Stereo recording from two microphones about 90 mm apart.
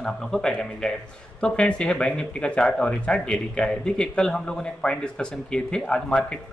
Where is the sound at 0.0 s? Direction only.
5° left (ahead or behind).